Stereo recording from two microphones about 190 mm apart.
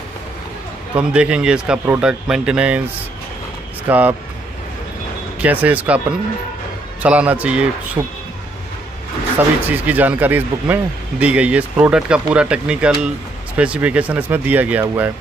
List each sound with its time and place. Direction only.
0.9 s speech: 5° right (ahead or behind)
3.9 s speech: 10° right (ahead or behind)
5.4 s speech: 10° right (ahead or behind)
9.7 s speech: 10° right (ahead or behind)